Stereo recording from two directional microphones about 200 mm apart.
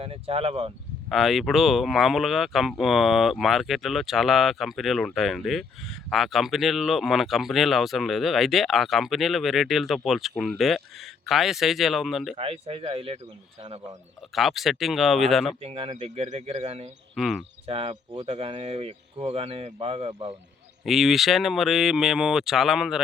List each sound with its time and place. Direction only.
0.0 s speech: 30° right (ahead or behind)
1.1 s speech: centre (ahead or behind)
12.4 s speech: 30° right (ahead or behind)
14.3 s speech: centre (ahead or behind)
15.6 s speech: 30° right (ahead or behind)
17.2 s speech: centre (ahead or behind)
17.7 s speech: 30° right (ahead or behind)
20.8 s speech: centre (ahead or behind)